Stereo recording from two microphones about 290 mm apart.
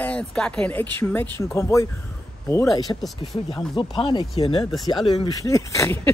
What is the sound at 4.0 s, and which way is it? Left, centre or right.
Speech, centre.